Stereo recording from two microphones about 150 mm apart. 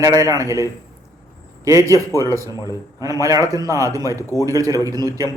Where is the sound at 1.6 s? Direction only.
20° right (ahead or behind).